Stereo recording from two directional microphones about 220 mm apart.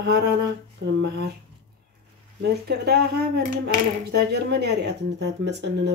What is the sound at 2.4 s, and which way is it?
Speech, 50° right (ahead or behind).